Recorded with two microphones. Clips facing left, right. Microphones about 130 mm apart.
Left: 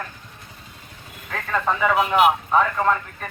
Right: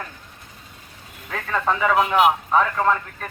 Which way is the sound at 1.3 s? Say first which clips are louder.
Even; centre (ahead or behind).